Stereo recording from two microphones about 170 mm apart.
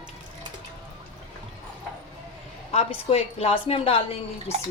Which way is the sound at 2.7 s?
40° left (ahead or behind).